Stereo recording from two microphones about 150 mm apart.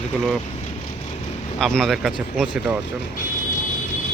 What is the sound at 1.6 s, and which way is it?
Speech, 5° left (ahead or behind).